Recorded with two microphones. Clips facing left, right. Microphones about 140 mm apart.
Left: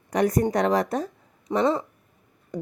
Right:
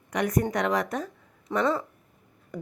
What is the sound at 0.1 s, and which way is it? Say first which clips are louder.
Speech: left 4 dB; 35° left (ahead or behind).